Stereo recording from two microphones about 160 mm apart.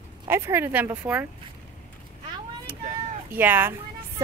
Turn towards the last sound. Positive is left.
turn(degrees=-10)  # may be behind; listen again after turning